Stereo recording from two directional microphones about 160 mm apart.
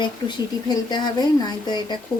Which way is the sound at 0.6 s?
25° left (ahead or behind).